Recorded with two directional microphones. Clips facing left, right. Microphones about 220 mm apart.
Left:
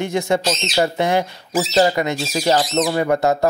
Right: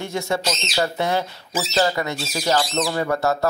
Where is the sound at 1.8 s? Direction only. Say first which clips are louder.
Left 4 dB; 20° left (ahead or behind).